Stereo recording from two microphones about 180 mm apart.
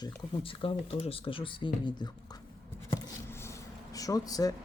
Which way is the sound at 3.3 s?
15° left (ahead or behind).